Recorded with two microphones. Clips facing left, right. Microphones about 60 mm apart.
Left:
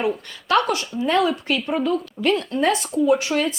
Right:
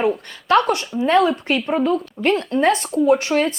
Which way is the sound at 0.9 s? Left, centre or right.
Centre.